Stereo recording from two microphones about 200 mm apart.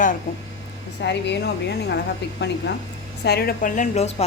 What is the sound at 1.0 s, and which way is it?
Speech, 60° left (ahead or behind).